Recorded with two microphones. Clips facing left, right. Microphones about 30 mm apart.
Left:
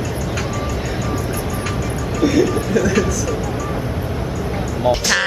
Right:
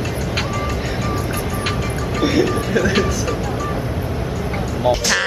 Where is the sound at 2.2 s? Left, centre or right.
Right.